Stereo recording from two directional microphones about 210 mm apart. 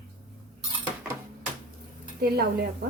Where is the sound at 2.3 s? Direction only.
45° right (ahead or behind).